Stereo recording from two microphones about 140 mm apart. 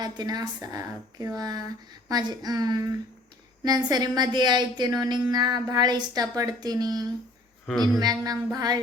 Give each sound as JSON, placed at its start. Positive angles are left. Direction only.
{"t": 0.0, "sound": "a woman's voice", "side_deg": -30}